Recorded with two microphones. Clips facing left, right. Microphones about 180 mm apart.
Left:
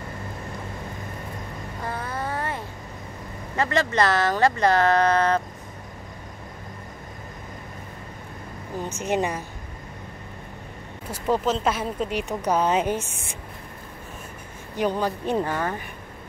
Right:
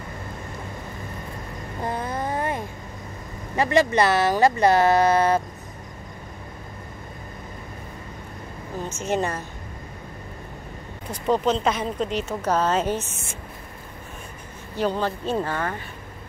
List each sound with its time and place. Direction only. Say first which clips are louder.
1.9 s a sound: right 3 dB; 20° right (ahead or behind)
3.5 s speech: right 3 dB; 15° right (ahead or behind)
8.8 s speech: even; 15° left (ahead or behind)
11.1 s speech: right 2 dB; 5° left (ahead or behind)
14.8 s speech: even; 10° left (ahead or behind)